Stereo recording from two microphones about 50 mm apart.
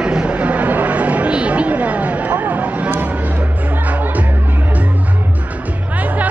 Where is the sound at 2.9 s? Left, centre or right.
Right.